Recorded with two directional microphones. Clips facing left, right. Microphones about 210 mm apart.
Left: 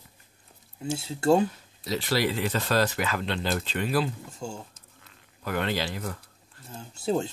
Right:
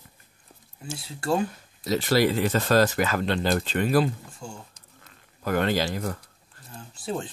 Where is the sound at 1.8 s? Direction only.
45° right (ahead or behind).